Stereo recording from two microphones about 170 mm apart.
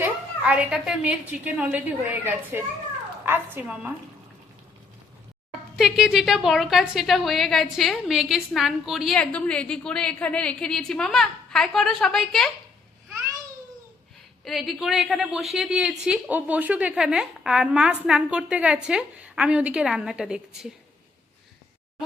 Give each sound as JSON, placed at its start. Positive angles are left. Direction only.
{"t": 0.0, "sound": "a woman's voice", "side_deg": -10}
{"t": 5.7, "sound": "a woman's voice", "side_deg": 0}
{"t": 14.4, "sound": "a woman's voice", "side_deg": 0}